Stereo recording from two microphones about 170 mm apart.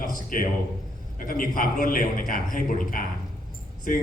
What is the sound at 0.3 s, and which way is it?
A man's voice, 55° left (ahead or behind).